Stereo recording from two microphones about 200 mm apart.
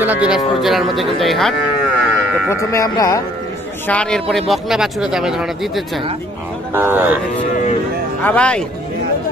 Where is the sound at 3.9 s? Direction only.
5° left (ahead or behind); by 7.2 s 10° right (ahead or behind).